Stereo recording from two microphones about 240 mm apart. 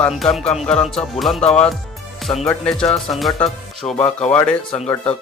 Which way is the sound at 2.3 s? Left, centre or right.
Left.